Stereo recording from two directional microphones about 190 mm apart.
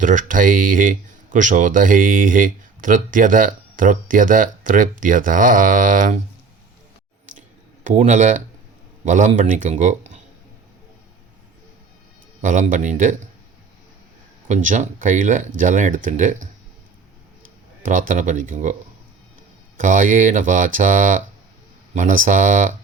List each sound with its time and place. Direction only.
0.0 s speech: 45° right (ahead or behind)
7.9 s speech: 40° right (ahead or behind)
12.4 s speech: 40° right (ahead or behind)
14.4 s speech: 40° right (ahead or behind)
17.8 s speech: 45° right (ahead or behind)